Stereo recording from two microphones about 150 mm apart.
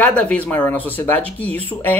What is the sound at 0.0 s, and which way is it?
Speech, 10° left (ahead or behind).